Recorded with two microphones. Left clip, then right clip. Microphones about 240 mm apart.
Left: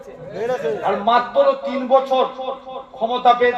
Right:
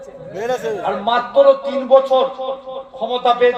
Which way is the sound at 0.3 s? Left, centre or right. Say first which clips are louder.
Right 1 dB; right.